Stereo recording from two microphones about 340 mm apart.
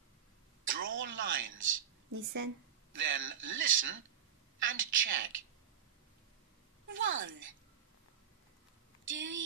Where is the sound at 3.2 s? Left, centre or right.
Right.